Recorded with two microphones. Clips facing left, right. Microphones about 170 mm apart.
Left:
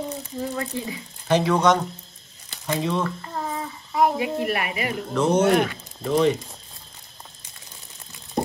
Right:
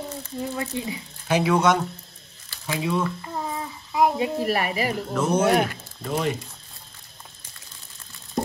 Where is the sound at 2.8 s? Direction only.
5° right (ahead or behind).